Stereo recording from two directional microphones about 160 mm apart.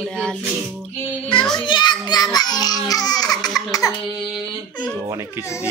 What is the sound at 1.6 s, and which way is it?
A child's voice, 30° left (ahead or behind).